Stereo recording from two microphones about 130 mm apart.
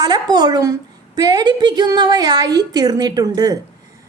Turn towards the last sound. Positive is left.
turn(degrees=-30)  # may be behind; listen again after turning